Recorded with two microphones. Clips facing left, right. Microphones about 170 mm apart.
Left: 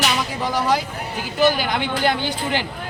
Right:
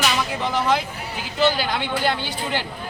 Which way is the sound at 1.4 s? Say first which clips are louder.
Left 2 dB; 15° left (ahead or behind).